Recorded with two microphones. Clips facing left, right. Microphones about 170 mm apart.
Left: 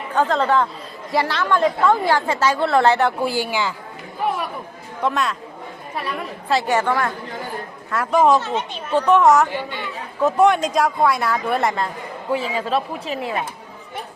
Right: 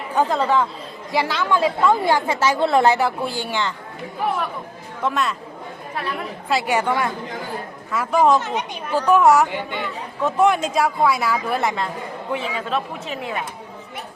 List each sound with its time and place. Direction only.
0.1 s a woman's voice: 10° right (ahead or behind)
3.1 s a woman's voice: 5° left (ahead or behind)
5.0 s a woman's voice: centre (ahead or behind)
6.5 s a woman's voice: 10° right (ahead or behind)
7.9 s a woman's voice: centre (ahead or behind)
8.4 s a woman's voice: 15° right (ahead or behind); by 11.9 s centre (ahead or behind)
12.4 s speech: 35° left (ahead or behind)